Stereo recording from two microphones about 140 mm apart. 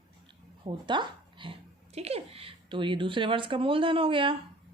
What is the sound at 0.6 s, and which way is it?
A child's voice, 35° right (ahead or behind).